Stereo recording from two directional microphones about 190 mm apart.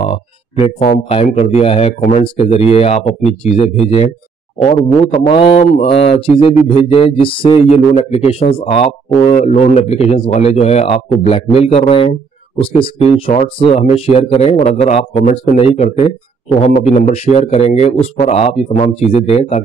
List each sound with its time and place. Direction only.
0.1 s speech: 30° left (ahead or behind)
4.6 s speech: 30° left (ahead or behind)